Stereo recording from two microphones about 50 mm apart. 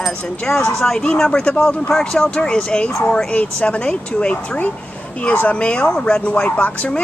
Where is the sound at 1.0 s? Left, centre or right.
Centre.